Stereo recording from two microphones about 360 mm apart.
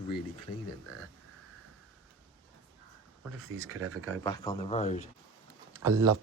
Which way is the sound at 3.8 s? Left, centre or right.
Right.